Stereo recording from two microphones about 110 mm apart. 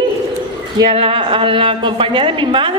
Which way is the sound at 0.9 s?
55° right (ahead or behind).